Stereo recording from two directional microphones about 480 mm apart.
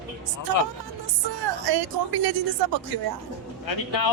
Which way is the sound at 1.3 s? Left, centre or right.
Right.